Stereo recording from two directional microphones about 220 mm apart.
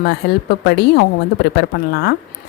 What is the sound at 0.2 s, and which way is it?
A woman's voice, 50° left (ahead or behind).